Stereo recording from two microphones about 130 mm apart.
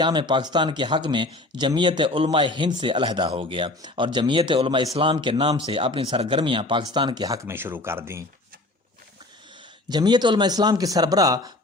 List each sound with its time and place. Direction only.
0.0 s speech: 35° right (ahead or behind); by 8.2 s 20° right (ahead or behind)
9.9 s speech: 35° right (ahead or behind)